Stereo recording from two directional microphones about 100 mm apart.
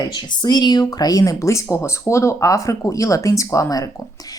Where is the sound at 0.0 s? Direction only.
45° left (ahead or behind).